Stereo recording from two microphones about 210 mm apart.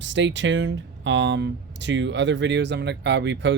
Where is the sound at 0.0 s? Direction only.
60° right (ahead or behind).